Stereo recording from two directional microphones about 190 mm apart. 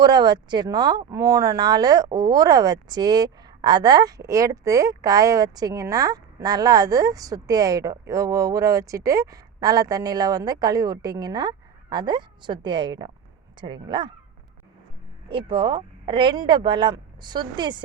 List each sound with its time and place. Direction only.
0.0 s speech: 20° right (ahead or behind)
15.3 s speech: 25° right (ahead or behind)